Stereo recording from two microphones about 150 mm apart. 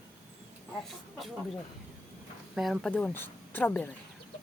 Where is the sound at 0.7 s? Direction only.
Centre (ahead or behind).